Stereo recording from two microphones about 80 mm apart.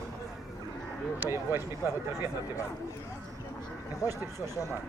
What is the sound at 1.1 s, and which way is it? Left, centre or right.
Speech, right.